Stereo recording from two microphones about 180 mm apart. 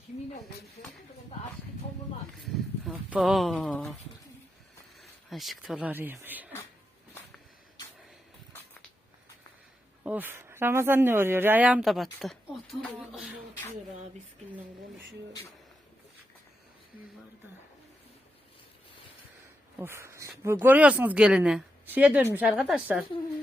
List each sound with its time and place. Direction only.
2.5 s speech: 5° right (ahead or behind)
4.9 s speech: centre (ahead or behind)
10.0 s speech: 10° right (ahead or behind)
19.8 s speech: 15° right (ahead or behind)